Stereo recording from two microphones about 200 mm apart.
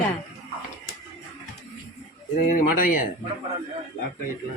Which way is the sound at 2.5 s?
45° left (ahead or behind).